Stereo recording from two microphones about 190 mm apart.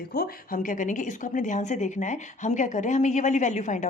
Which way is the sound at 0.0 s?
55° left (ahead or behind).